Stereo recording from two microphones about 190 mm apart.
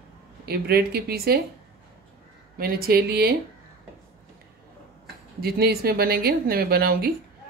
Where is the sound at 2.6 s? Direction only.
55° right (ahead or behind).